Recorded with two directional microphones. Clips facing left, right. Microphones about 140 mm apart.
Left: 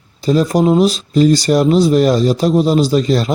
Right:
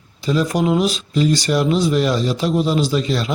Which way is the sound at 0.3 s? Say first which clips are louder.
Left 5 dB; 40° left (ahead or behind).